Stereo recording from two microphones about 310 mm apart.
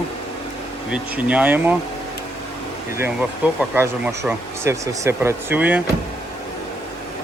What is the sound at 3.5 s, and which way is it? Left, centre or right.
Speech, centre.